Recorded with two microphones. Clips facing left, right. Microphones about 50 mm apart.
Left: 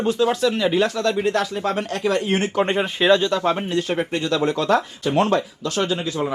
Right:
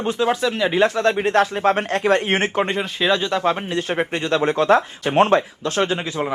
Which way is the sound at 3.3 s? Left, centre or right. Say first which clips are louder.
Even; right.